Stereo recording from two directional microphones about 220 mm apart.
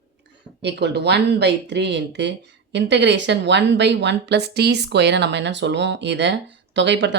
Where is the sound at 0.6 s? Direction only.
50° right (ahead or behind).